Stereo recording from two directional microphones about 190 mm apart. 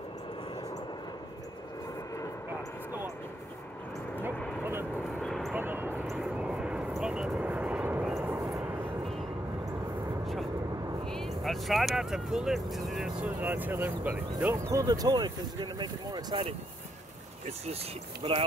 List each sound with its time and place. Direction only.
5.2 s a sound: centre (ahead or behind)
5.6 s vehicle: 10° right (ahead or behind)
10.2 s vehicle: centre (ahead or behind)
11.1 s speech: centre (ahead or behind); by 16.5 s 25° right (ahead or behind)
18.2 s speech: 30° right (ahead or behind)